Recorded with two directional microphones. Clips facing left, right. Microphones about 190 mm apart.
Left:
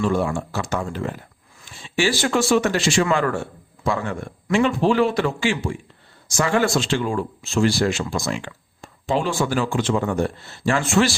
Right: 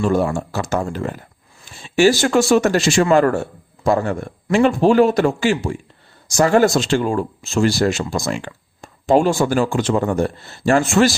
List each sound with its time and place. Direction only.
0.0 s speech: 40° right (ahead or behind)